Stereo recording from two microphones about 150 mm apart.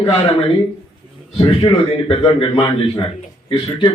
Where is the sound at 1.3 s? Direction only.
40° left (ahead or behind).